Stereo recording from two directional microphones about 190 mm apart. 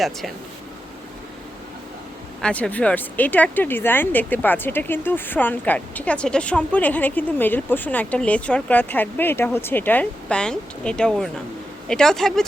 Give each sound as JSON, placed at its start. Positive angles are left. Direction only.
{"t": 0.0, "sound": "speech", "side_deg": 0}
{"t": 2.4, "sound": "speech", "side_deg": 5}